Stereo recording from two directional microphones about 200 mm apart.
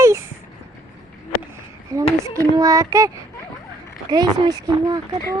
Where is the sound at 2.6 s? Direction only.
15° right (ahead or behind).